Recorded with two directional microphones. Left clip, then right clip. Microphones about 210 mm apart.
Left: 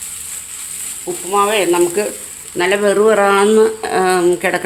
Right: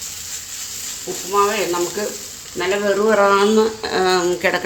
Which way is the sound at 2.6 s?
55° left (ahead or behind).